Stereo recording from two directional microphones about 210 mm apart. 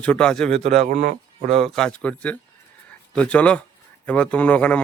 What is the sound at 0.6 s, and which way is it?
A man's voice, 30° right (ahead or behind).